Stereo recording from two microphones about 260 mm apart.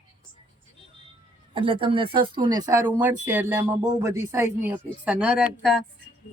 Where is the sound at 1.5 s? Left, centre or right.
Right.